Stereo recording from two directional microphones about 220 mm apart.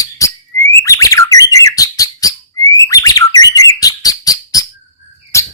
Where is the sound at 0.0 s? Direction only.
15° left (ahead or behind).